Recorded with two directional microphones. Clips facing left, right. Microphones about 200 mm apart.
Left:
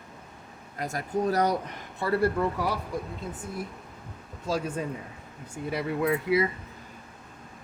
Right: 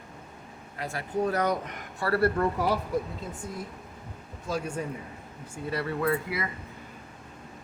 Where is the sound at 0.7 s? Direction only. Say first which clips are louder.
Left 1 dB; 40° left (ahead or behind).